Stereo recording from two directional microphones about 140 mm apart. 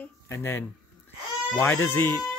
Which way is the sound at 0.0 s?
15° left (ahead or behind).